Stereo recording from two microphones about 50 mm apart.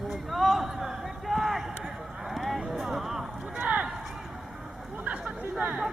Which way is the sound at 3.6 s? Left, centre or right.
Right.